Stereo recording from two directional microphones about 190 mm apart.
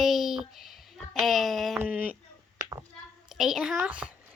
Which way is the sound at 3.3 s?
Centre (ahead or behind).